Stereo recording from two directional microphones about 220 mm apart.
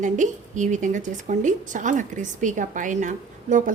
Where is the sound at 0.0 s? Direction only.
35° right (ahead or behind).